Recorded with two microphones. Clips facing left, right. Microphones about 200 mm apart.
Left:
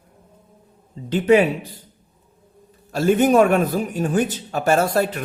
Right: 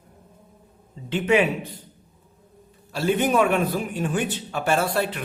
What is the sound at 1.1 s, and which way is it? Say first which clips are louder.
Speech: left 5 dB; 40° left (ahead or behind).